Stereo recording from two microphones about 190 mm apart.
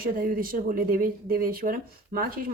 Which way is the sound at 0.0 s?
50° right (ahead or behind).